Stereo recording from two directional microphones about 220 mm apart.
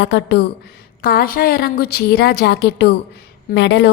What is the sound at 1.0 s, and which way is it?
A woman's voice, 45° left (ahead or behind).